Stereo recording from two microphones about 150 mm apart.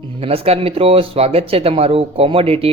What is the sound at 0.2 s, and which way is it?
Speech, 40° right (ahead or behind).